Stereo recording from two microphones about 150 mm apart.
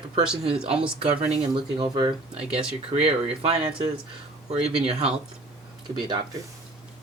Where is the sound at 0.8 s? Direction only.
40° right (ahead or behind).